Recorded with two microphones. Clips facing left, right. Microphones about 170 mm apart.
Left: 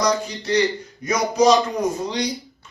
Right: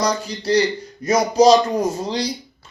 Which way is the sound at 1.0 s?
30° right (ahead or behind).